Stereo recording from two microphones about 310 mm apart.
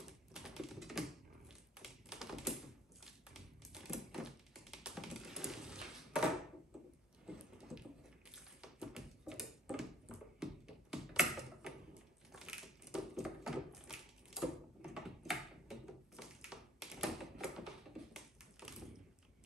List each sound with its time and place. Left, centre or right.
0.3 s typing: centre
1.5 s tap: centre
7.2 s a sound: centre
13.7 s typing: centre
18.1 s tap: centre